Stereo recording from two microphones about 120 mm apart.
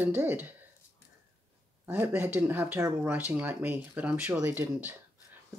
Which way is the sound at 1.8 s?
15° right (ahead or behind).